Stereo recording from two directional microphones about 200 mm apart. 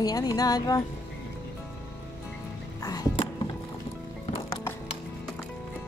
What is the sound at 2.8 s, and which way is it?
Music, 20° left (ahead or behind).